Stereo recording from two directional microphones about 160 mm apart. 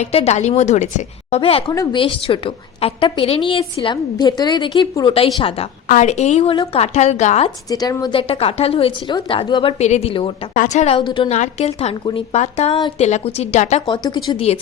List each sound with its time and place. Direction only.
0.0 s a woman's voice: 40° left (ahead or behind)
1.7 s a woman's voice: 20° left (ahead or behind)
2.0 s a woman's voice: 35° left (ahead or behind)
5.9 s a woman's voice: 45° left (ahead or behind)
7.7 s a woman's voice: 25° left (ahead or behind)
9.7 s a woman's voice: 45° left (ahead or behind)
10.5 s a woman's voice: 50° left (ahead or behind); by 11.3 s 30° left (ahead or behind)
11.3 s a woman's voice: 45° left (ahead or behind)
13.8 s a woman's voice: 25° left (ahead or behind)